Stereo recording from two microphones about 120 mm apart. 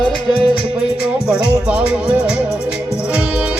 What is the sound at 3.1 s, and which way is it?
Music, 10° right (ahead or behind).